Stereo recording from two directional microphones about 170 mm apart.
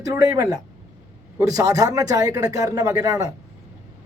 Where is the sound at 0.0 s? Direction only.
20° right (ahead or behind).